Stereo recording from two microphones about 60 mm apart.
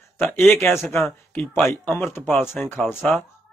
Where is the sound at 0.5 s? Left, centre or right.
Left.